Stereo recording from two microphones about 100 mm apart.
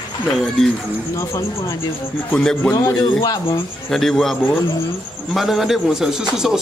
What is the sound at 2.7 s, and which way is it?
Speech, 40° left (ahead or behind).